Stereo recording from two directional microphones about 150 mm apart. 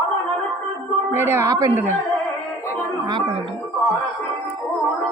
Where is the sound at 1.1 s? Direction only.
15° right (ahead or behind).